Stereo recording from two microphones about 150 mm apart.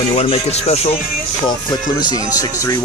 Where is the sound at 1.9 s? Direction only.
25° left (ahead or behind).